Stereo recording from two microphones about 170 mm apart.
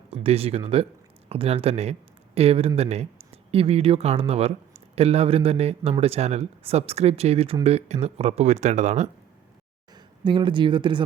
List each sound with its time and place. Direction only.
0.1 s speech: 35° right (ahead or behind)
9.9 s speech: 30° right (ahead or behind)